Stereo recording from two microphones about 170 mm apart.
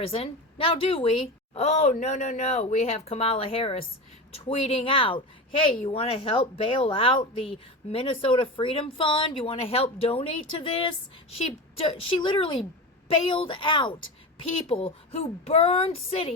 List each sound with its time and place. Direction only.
0.0 s speech: 35° left (ahead or behind)